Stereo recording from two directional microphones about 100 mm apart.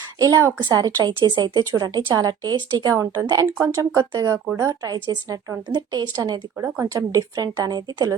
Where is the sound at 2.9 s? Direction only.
30° right (ahead or behind).